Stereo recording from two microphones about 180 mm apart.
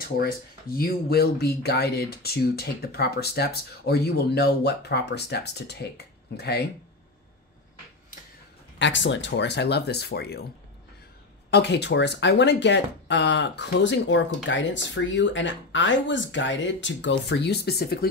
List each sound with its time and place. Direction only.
0.2 s speech: 55° left (ahead or behind)
8.7 s speech: 85° left; by 10.4 s 65° left (ahead or behind)
11.5 s speech: 70° left (ahead or behind)